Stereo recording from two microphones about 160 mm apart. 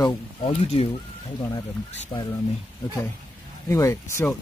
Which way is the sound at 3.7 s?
20° left (ahead or behind).